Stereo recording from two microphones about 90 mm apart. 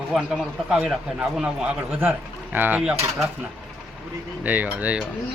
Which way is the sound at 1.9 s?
20° right (ahead or behind).